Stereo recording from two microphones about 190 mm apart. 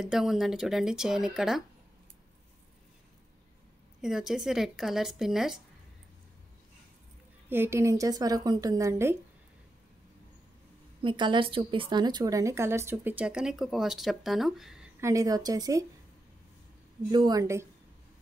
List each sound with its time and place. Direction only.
0.0 s speech: centre (ahead or behind)
4.0 s speech: centre (ahead or behind)
7.4 s a woman's voice: 10° right (ahead or behind)
11.0 s a woman's voice: 25° right (ahead or behind); by 14.9 s 5° right (ahead or behind)
15.0 s a woman's voice: 15° right (ahead or behind)
17.1 s a woman's voice: 20° right (ahead or behind)